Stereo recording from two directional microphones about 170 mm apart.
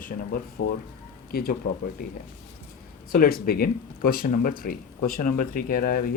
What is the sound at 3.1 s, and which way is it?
Speech, 60° left (ahead or behind).